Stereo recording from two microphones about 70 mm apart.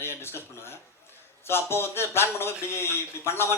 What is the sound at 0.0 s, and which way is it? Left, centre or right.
Speech, left.